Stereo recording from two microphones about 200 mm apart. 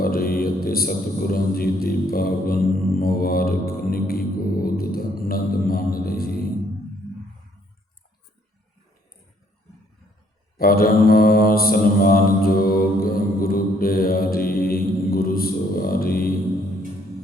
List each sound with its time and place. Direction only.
0.0 s mantra: 50° left (ahead or behind)
10.6 s mantra: 50° left (ahead or behind)